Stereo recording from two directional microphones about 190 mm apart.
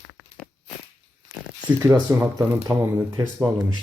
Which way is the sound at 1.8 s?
15° right (ahead or behind).